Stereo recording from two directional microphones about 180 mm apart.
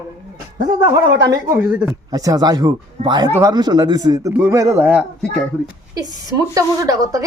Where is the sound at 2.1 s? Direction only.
20° right (ahead or behind).